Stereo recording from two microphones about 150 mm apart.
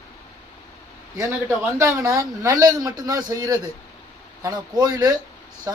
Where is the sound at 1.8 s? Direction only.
20° right (ahead or behind).